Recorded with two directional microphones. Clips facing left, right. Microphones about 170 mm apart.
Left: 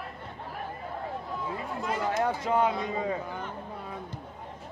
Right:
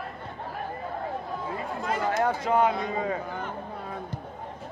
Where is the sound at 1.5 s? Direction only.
70° right (ahead or behind).